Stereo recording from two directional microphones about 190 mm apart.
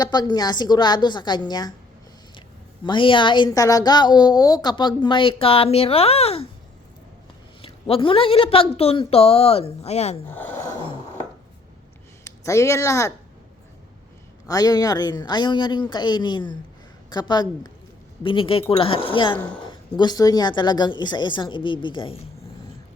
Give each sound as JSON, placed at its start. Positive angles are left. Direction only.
{"t": 0.0, "sound": "a woman's voice", "side_deg": 20}
{"t": 2.8, "sound": "a woman's voice", "side_deg": 25}
{"t": 7.6, "sound": "a woman's voice", "side_deg": 30}
{"t": 10.3, "sound": "gasp", "side_deg": 10}
{"t": 12.2, "sound": "speech", "side_deg": 15}
{"t": 14.4, "sound": "a woman's voice", "side_deg": 20}